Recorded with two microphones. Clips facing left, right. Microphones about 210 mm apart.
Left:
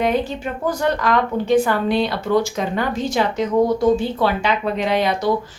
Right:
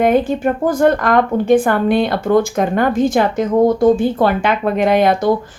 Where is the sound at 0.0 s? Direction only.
50° right (ahead or behind).